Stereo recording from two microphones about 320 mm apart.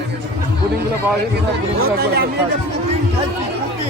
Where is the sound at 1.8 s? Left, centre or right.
Right.